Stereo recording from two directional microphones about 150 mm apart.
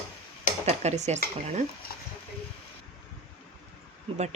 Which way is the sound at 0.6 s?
45° right (ahead or behind).